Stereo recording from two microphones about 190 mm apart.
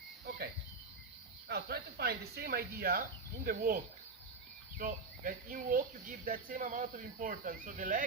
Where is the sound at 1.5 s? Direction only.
55° right (ahead or behind).